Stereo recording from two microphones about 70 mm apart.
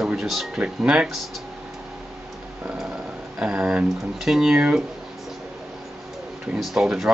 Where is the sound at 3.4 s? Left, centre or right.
Centre.